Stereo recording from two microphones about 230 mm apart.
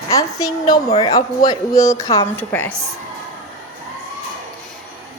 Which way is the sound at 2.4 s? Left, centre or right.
Centre.